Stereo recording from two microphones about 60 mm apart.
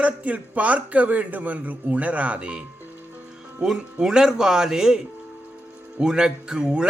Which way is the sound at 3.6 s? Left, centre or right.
Centre.